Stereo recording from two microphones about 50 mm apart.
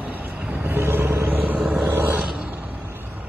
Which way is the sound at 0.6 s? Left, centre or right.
Right.